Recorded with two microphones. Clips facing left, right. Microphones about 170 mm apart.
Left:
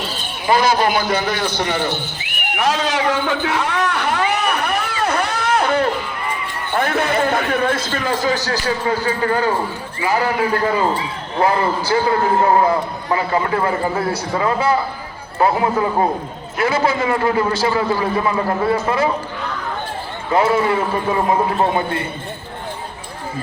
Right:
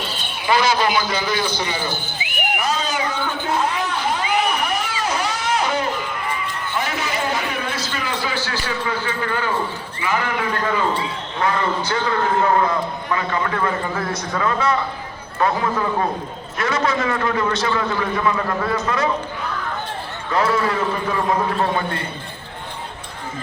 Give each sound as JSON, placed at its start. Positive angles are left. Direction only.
{"t": 0.4, "sound": "a man's voice", "side_deg": 50}
{"t": 2.6, "sound": "a sound", "side_deg": 90}
{"t": 6.7, "sound": "a man's voice", "side_deg": 55}
{"t": 20.3, "sound": "a man's voice", "side_deg": 25}